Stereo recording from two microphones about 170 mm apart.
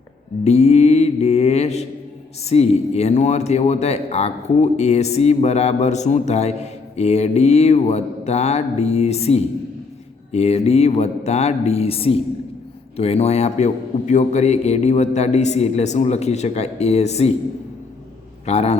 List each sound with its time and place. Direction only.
0.4 s speech: 40° left (ahead or behind)
18.4 s speech: 40° left (ahead or behind)